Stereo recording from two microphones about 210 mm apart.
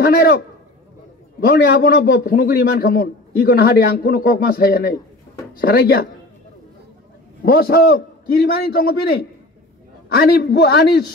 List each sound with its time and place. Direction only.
0.0 s a man's voice: 45° left (ahead or behind)
1.4 s a man's voice: 45° left (ahead or behind)
7.4 s a man's voice: 45° left (ahead or behind)